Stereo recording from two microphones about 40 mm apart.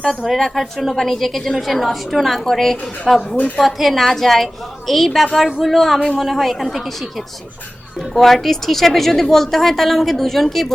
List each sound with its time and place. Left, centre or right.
0.3 s a woman's voice: centre
3.3 s a woman's voice: left
3.6 s a woman's voice: centre